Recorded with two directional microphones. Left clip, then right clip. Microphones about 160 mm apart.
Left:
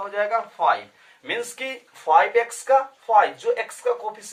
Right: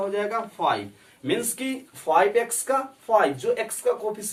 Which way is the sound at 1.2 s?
20° left (ahead or behind).